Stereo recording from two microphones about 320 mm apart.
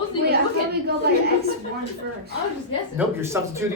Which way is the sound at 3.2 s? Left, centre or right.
Centre.